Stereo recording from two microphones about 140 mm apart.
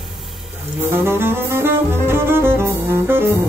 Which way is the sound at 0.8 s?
15° right (ahead or behind).